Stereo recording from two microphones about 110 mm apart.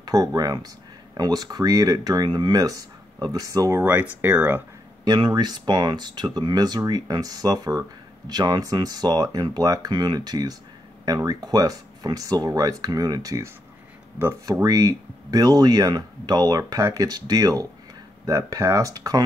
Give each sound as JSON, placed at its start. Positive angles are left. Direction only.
{"t": 0.0, "sound": "speech", "side_deg": -35}
{"t": 3.8, "sound": "speech", "side_deg": -15}
{"t": 5.0, "sound": "speech", "side_deg": -40}